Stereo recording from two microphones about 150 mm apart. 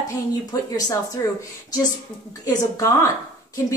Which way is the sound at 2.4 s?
20° left (ahead or behind).